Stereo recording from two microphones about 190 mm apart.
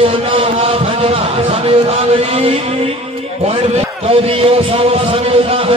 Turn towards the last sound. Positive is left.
turn(degrees=-30)  # may be behind; listen again after turning